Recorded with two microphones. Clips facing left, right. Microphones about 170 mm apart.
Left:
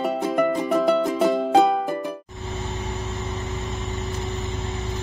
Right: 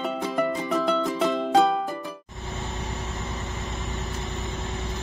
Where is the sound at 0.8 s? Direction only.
15° left (ahead or behind).